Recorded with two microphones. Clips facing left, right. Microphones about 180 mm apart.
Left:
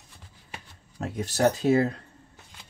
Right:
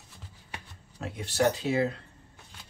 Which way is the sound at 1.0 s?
40° left (ahead or behind).